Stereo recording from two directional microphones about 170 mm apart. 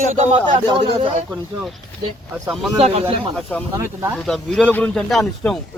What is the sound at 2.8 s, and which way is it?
Music, 35° right (ahead or behind).